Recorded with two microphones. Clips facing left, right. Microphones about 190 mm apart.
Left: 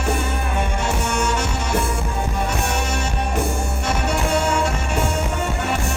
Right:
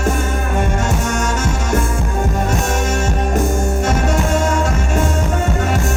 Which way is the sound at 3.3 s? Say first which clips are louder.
Right 7 dB; 45° right (ahead or behind).